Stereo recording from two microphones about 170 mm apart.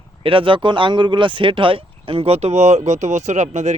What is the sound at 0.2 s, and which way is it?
Speech, 30° right (ahead or behind).